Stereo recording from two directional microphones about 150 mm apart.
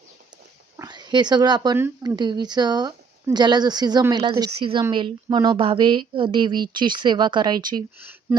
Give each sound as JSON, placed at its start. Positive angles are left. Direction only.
{"t": 0.8, "sound": "a woman's voice", "side_deg": -30}